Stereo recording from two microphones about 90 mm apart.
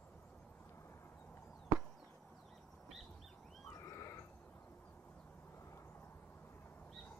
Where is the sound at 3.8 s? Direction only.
35° left (ahead or behind).